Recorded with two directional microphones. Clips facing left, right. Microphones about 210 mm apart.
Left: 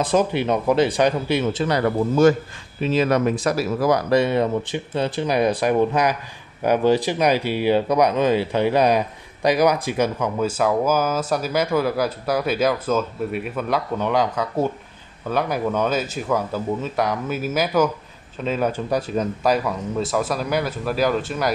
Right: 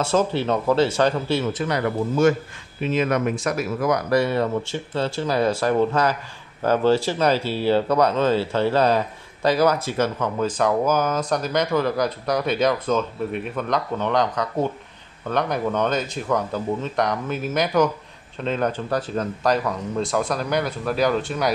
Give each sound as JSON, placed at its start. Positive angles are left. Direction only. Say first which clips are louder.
{"t": 0.0, "sound": "speech", "louder": "left 1 dB", "side_deg": 15}
{"t": 1.5, "sound": "speech", "louder": "left 3 dB", "side_deg": 30}